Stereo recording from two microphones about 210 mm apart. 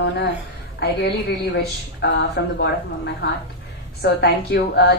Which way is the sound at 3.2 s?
50° left (ahead or behind).